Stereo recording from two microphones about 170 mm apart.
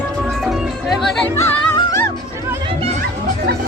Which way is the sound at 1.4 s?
15° left (ahead or behind).